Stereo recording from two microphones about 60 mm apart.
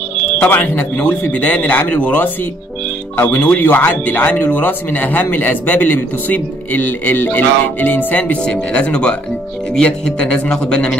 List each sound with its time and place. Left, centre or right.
0.5 s speech: left
8.4 s a man's voice: centre